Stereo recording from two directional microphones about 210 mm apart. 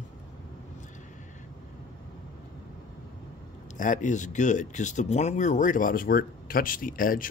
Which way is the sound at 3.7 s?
35° left (ahead or behind).